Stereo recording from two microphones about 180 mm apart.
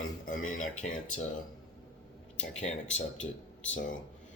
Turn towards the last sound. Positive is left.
turn(degrees=40)  # may be behind; listen again after turning